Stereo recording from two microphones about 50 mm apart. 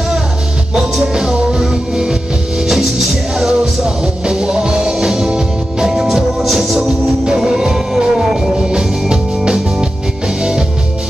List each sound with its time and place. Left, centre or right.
0.9 s music: centre
9.1 s music: centre